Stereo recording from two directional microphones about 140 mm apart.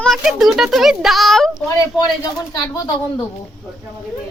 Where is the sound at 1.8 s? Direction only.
25° left (ahead or behind).